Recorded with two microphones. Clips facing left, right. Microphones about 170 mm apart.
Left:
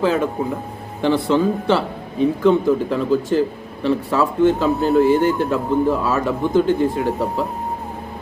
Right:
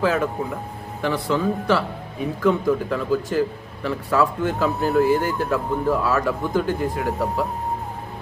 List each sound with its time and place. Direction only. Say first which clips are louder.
0.0 s speech: left 3 dB; 25° left (ahead or behind)